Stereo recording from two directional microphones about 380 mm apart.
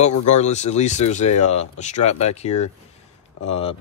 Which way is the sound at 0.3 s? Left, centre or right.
Centre.